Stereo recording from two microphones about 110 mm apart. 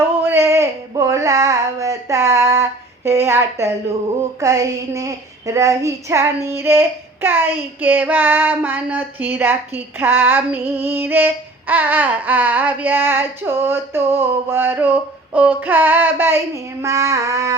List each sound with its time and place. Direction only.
0.0 s female singing: 20° right (ahead or behind)
4.4 s child singing: 30° right (ahead or behind)